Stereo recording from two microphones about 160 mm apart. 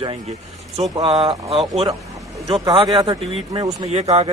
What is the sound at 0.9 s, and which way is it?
Speech, 25° right (ahead or behind).